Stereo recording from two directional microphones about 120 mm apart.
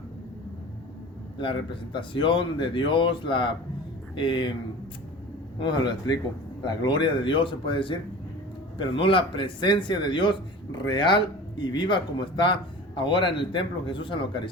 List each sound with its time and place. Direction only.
1.4 s speech: 45° left (ahead or behind)
5.5 s speech: 40° left (ahead or behind)